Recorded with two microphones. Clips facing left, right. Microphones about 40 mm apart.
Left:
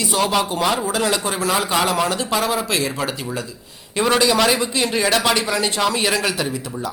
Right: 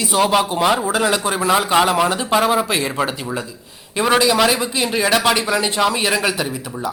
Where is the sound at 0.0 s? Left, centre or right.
Centre.